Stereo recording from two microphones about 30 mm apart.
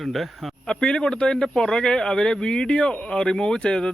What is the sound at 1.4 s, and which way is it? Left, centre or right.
Speech, left.